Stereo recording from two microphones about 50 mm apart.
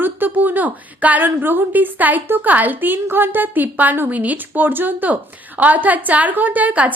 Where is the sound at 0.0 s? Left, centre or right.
Right.